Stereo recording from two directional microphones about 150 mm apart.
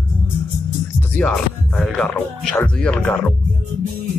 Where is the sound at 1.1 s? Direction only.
5° left (ahead or behind).